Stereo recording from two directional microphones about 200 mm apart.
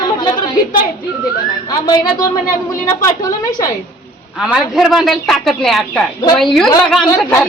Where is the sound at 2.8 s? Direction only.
20° left (ahead or behind).